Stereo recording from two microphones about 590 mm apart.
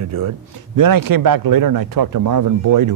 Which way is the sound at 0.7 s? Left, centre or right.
Right.